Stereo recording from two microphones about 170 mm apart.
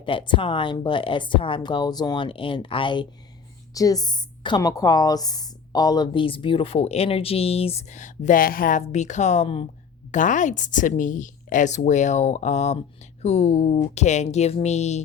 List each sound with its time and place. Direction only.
0.0 s a woman's voice: 30° left (ahead or behind)
10.1 s a woman's voice: 50° left (ahead or behind)